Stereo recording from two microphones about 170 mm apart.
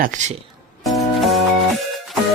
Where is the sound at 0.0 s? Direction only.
45° right (ahead or behind).